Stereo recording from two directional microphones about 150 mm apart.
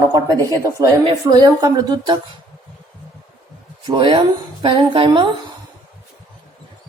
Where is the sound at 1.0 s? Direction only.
25° right (ahead or behind).